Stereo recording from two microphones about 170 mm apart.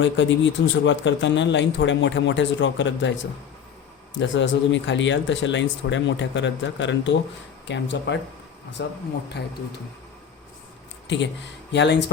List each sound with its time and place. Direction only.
0.0 s a man's voice: 90° left
4.2 s a man's voice: 90° left
11.1 s a man's voice: 90° left